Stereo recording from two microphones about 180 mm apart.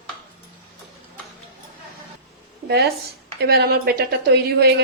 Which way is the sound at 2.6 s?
65° right (ahead or behind).